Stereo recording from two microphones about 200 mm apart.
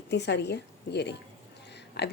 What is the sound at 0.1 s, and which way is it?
A woman's voice, 60° left (ahead or behind).